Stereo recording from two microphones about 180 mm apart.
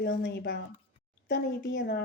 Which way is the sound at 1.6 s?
75° left (ahead or behind).